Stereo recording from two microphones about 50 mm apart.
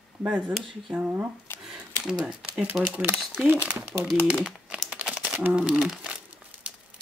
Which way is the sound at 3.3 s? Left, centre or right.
Right.